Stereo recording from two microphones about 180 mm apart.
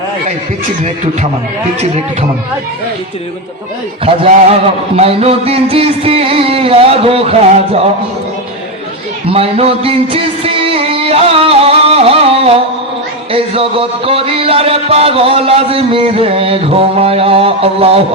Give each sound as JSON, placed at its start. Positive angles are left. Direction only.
{"t": 4.0, "sound": "music", "side_deg": -30}
{"t": 9.3, "sound": "music", "side_deg": -35}